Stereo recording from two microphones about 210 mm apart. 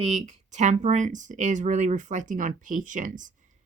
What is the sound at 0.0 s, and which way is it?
Speech, 30° right (ahead or behind).